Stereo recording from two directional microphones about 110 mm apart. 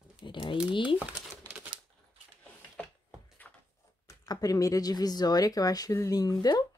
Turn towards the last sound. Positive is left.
turn(degrees=35)  # may be behind; listen again after turning